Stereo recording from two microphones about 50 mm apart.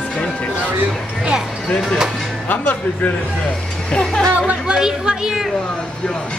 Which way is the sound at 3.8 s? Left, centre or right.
Centre.